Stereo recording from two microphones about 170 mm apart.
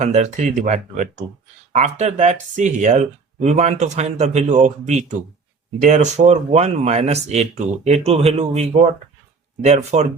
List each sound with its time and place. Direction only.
0.0 s speech: 45° right (ahead or behind)